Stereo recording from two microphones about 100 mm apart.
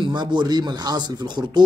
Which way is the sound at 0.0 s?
50° right (ahead or behind).